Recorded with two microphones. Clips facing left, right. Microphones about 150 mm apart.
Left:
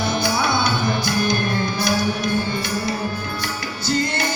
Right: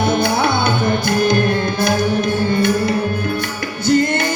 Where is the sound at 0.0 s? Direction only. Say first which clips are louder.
Right 5 dB; 55° right (ahead or behind).